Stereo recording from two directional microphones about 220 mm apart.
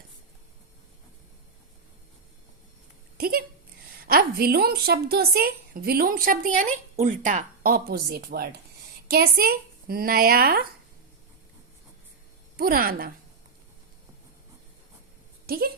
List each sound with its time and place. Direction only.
3.2 s a woman's voice: 45° right (ahead or behind)
12.5 s a woman's voice: 40° right (ahead or behind)
15.4 s speech: 45° right (ahead or behind)